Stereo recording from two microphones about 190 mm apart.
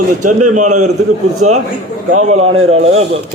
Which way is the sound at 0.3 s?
40° right (ahead or behind).